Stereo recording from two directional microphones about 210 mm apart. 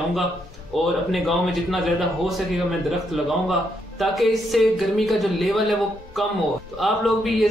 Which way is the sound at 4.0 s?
Centre (ahead or behind).